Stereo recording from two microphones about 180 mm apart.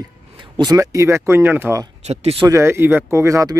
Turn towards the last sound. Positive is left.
turn(degrees=-20)  # may be behind; listen again after turning